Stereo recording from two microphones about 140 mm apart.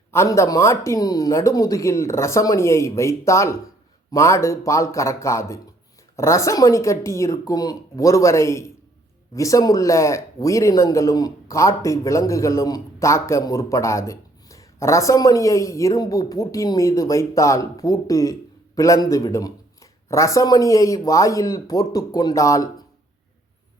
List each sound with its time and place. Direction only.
0.1 s speech: 20° left (ahead or behind)